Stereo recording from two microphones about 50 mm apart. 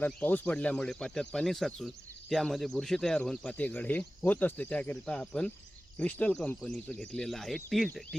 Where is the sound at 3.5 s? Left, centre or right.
Left.